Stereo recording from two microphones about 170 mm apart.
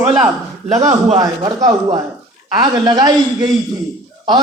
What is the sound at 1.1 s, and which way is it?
A man's voice, 25° right (ahead or behind).